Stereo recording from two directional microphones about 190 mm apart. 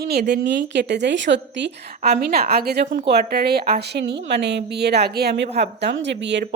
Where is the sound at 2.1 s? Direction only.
55° right (ahead or behind).